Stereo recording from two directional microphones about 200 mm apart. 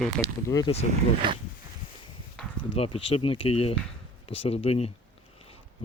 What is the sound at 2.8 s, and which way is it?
Speech, 30° left (ahead or behind).